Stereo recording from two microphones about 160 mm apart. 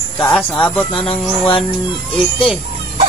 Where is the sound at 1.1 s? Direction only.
30° left (ahead or behind).